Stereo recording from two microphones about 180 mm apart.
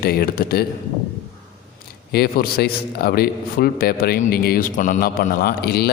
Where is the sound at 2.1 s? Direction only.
60° left (ahead or behind).